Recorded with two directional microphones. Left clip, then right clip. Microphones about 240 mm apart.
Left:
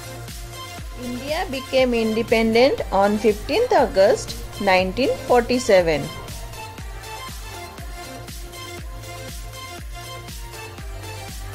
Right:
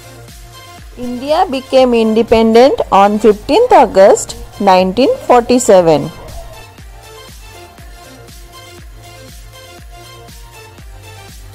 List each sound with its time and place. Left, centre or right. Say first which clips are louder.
1.2 s a woman's voice: right 13 dB; right